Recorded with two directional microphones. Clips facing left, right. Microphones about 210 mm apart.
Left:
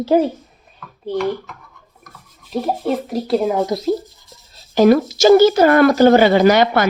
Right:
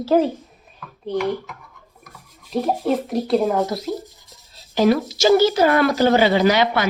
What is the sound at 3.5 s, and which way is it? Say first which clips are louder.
Speech: left 2 dB; 15° left (ahead or behind).